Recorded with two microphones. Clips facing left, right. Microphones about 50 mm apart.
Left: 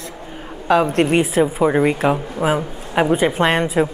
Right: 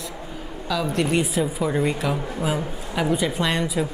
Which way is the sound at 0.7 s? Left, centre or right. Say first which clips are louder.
Left 8 dB; left.